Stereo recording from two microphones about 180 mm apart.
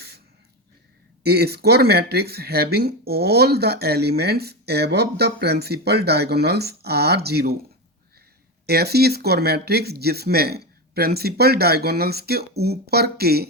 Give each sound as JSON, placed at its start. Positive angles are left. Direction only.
{"t": 1.2, "sound": "speech", "side_deg": -60}
{"t": 8.6, "sound": "speech", "side_deg": -60}